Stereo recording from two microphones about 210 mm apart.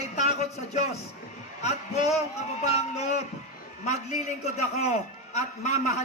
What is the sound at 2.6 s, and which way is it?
A man's voice, 30° left (ahead or behind).